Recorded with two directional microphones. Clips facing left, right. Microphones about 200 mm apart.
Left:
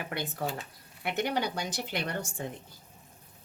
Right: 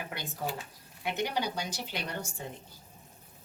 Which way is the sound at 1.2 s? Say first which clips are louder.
Left 3 dB; 55° left (ahead or behind).